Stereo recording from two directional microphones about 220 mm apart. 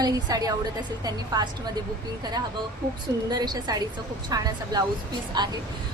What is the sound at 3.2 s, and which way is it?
A woman's voice, 20° right (ahead or behind).